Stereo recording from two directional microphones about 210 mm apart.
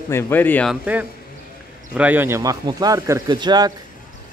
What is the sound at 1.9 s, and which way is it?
Speech, 10° right (ahead or behind).